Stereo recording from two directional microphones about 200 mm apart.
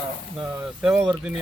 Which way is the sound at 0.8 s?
Centre (ahead or behind).